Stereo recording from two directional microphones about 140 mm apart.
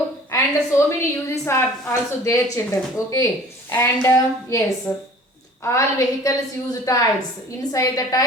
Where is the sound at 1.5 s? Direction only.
20° left (ahead or behind).